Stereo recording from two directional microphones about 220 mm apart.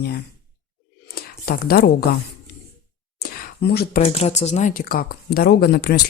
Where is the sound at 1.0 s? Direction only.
45° left (ahead or behind).